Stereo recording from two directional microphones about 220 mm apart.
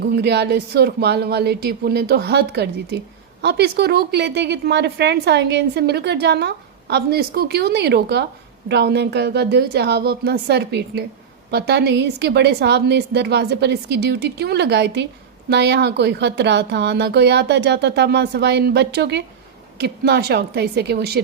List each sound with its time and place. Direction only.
0.0 s a woman's voice: 50° right (ahead or behind)